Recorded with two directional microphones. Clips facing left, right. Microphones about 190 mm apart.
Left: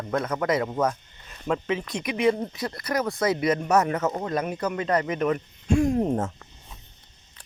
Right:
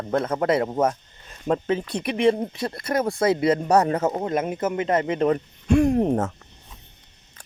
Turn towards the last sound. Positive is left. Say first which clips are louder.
# right 3 dB
turn(degrees=-70)  # may be behind; listen again after turning